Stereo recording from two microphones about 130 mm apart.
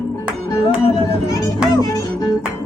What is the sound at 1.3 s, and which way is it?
Music, 25° left (ahead or behind).